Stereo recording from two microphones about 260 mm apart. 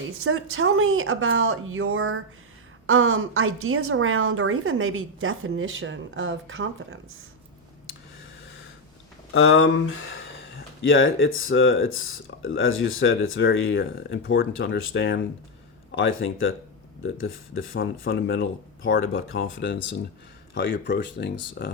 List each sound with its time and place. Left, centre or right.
0.3 s a woman's voice: right
9.3 s speech: left
17.6 s speech: left